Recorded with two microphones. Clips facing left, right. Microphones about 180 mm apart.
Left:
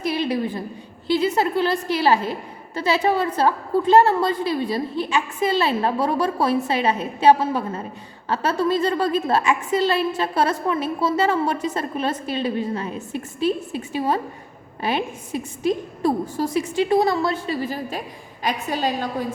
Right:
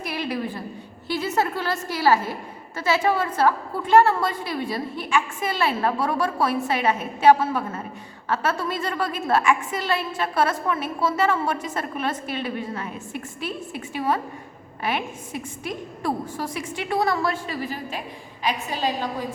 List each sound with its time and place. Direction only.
0.0 s a sound: 25° left (ahead or behind)
1.0 s a woman's voice: 15° left (ahead or behind)
18.4 s a woman's voice: 50° left (ahead or behind)